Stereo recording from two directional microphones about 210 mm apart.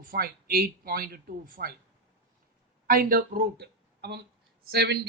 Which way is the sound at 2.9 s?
45° right (ahead or behind).